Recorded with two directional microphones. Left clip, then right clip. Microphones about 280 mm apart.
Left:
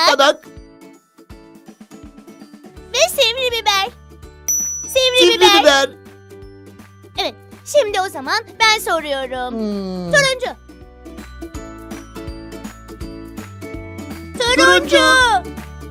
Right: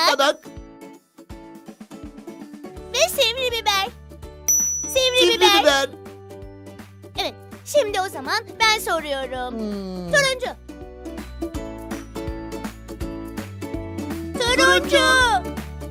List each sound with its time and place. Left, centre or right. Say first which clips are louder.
0.0 s music: left 5 dB; centre
2.9 s music: left 4 dB; centre
4.9 s a child's voice: left 5 dB; centre
7.2 s a child's voice: left 4 dB; centre
12.2 s music: right 1 dB; right
14.3 s speech: left 5 dB; centre